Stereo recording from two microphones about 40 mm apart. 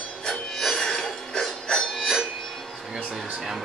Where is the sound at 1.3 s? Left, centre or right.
Centre.